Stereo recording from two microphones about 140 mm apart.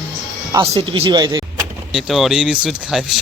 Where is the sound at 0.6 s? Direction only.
45° right (ahead or behind).